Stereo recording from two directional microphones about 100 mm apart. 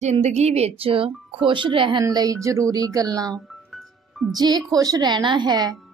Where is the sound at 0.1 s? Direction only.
90° right; by 2.0 s 55° right (ahead or behind).